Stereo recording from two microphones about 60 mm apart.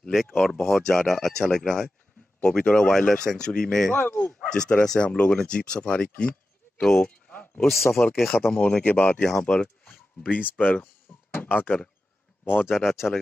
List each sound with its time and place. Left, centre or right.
0.1 s speech: centre
0.4 s speech: centre
3.9 s speech: left
4.3 s speech: centre
7.0 s a sound: left
7.6 s speech: centre
8.6 s speech: left
12.7 s speech: centre